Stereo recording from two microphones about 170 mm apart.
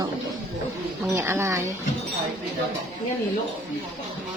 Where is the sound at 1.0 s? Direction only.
15° right (ahead or behind).